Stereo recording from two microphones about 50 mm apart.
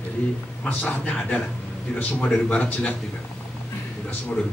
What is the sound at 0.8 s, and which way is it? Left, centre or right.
A man's voice, left.